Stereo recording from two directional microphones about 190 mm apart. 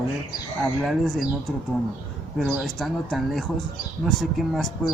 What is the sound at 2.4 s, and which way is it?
Speech, centre (ahead or behind).